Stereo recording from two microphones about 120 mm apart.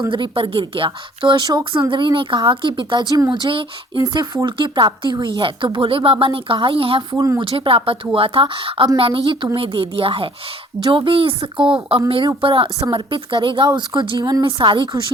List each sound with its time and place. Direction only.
0.1 s a woman's voice: 45° right (ahead or behind)
7.1 s speech: 25° right (ahead or behind)
7.3 s a woman's voice: 45° right (ahead or behind)
14.2 s speech: 30° right (ahead or behind)
14.4 s a woman's voice: 40° right (ahead or behind)